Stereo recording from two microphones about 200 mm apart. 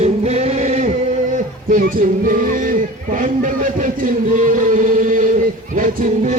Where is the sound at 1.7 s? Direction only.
45° right (ahead or behind).